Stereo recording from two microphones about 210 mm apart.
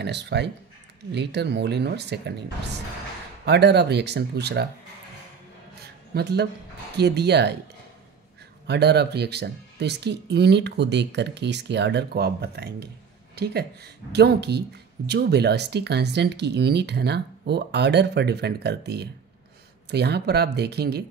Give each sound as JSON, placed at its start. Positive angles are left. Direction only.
{"t": 0.0, "sound": "speech", "side_deg": -55}
{"t": 3.4, "sound": "speech", "side_deg": -55}
{"t": 6.1, "sound": "speech", "side_deg": -50}
{"t": 8.6, "sound": "speech", "side_deg": -50}